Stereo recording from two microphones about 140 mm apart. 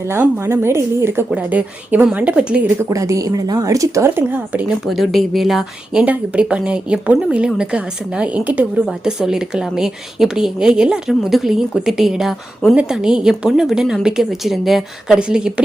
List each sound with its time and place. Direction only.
0.1 s speech: 20° right (ahead or behind)
2.9 s speech: 25° right (ahead or behind)
4.9 s a woman's voice: centre (ahead or behind)